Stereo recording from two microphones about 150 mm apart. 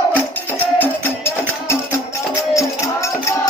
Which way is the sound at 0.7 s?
15° left (ahead or behind).